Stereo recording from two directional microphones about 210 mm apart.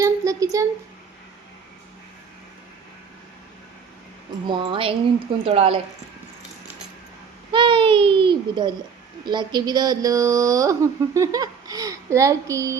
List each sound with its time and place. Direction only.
0.0 s a sound: 15° right (ahead or behind)
4.4 s a child's voice: 25° right (ahead or behind)
7.5 s a child's voice: 25° right (ahead or behind)